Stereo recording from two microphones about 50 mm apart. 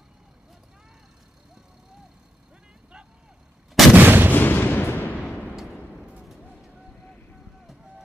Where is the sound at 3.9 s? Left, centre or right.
Right.